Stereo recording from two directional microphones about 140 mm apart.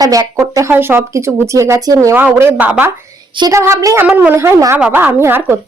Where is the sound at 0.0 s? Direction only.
25° right (ahead or behind).